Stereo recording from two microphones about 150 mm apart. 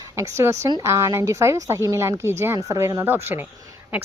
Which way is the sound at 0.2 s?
20° right (ahead or behind).